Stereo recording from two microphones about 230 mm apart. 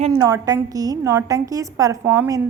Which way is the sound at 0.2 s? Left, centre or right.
Centre.